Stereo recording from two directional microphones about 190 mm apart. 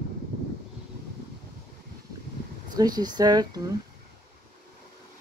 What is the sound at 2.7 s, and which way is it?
Speech, 20° right (ahead or behind).